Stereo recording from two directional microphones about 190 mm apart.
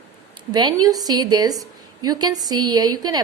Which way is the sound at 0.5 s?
20° right (ahead or behind).